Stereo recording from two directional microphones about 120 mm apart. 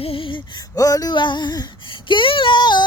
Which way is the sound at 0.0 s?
50° left (ahead or behind).